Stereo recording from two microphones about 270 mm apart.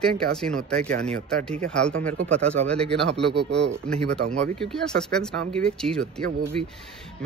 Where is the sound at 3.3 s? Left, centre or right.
Right.